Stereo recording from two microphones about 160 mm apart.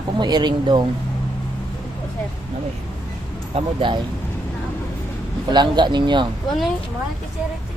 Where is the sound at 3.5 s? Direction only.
30° right (ahead or behind).